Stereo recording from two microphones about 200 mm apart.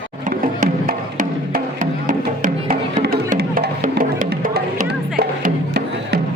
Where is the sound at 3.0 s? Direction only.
50° right (ahead or behind).